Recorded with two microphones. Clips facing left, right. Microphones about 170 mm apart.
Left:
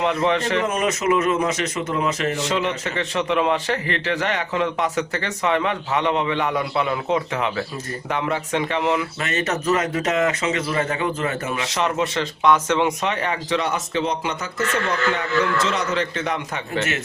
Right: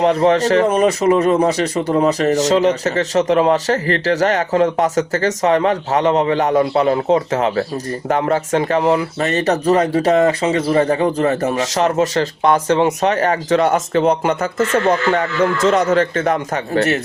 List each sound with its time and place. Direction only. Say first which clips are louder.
0.0 s speech: right 7 dB; 40° right (ahead or behind)